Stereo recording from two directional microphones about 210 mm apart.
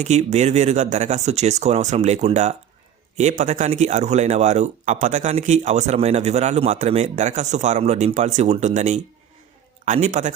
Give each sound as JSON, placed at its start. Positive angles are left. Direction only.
{"t": 0.0, "sound": "speech", "side_deg": -30}